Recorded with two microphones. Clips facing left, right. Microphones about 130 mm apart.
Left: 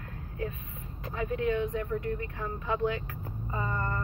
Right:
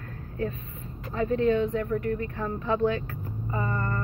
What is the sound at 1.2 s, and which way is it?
Speech, 10° left (ahead or behind).